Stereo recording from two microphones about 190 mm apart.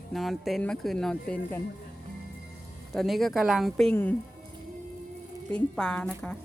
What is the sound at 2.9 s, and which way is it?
Speech, centre (ahead or behind).